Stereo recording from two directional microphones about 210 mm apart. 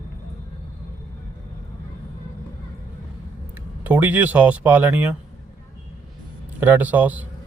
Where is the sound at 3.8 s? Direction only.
10° right (ahead or behind).